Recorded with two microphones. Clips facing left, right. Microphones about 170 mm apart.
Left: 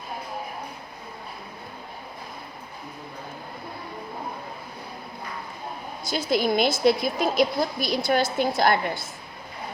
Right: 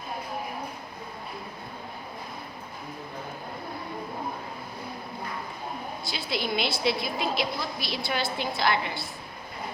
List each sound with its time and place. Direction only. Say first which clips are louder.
6.1 s a woman's voice: left 8 dB; 45° left (ahead or behind)